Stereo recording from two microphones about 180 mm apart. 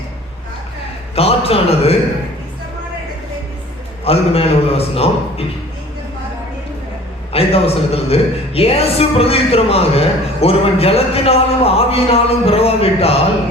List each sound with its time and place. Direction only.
1.1 s a man's voice: 35° left (ahead or behind)
4.0 s a woman's voice: 35° left (ahead or behind)
7.3 s a woman's voice: 35° left (ahead or behind)